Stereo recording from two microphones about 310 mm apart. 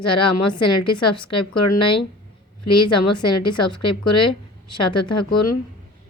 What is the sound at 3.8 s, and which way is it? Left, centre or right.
Speech, left.